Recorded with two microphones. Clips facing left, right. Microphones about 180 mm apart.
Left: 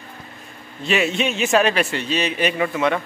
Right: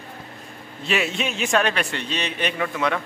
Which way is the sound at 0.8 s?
Centre (ahead or behind).